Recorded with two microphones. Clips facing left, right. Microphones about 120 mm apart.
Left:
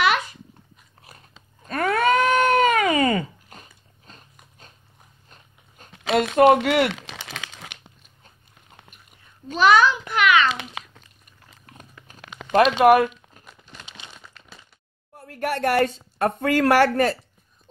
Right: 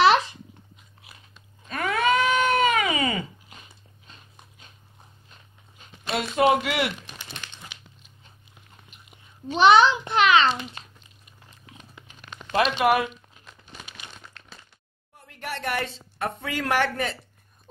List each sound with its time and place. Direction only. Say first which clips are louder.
0.0 s babbling: right 3 dB; 30° right (ahead or behind)
1.1 s biting: left 3 dB; 45° left (ahead or behind)
1.6 s cat: left 4 dB; 45° left (ahead or behind)
4.1 s biting: left 2 dB; 40° left (ahead or behind)
6.1 s speech: left 6 dB; 55° left (ahead or behind)
6.9 s crumpling: left 4 dB; 90° left; by 7.9 s 65° left (ahead or behind)
9.5 s a child's voice: right 1 dB; 25° right (ahead or behind)
10.5 s a child's voice: even; 90° left
11.6 s biting: left 2 dB; 50° left (ahead or behind)
12.5 s speech: left 6 dB; 45° left (ahead or behind)
13.8 s crumpling: left 1 dB; 25° left (ahead or behind)
14.1 s a sound: even; centre (ahead or behind)
15.1 s speech: left 8 dB; 45° left (ahead or behind)